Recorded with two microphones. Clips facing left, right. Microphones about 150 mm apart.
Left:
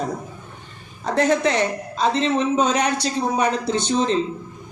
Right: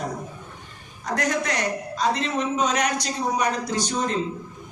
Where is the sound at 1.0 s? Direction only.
25° left (ahead or behind).